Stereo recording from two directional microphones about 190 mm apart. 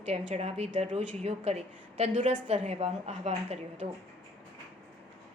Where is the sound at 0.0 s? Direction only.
35° right (ahead or behind).